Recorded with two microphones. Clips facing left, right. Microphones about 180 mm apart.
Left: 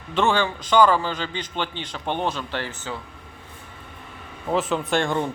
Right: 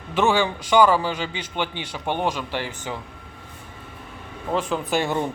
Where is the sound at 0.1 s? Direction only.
10° right (ahead or behind).